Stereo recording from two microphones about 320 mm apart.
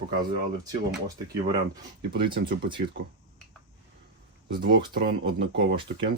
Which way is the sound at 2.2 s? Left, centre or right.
Centre.